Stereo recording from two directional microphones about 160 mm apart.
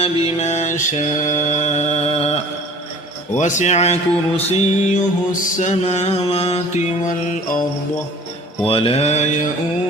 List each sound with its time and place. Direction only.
0.0 s music: 45° left (ahead or behind)
8.6 s mantra: 35° left (ahead or behind)